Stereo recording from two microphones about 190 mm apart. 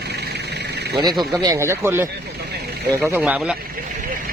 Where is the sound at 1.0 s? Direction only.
20° right (ahead or behind); by 3.5 s 5° right (ahead or behind).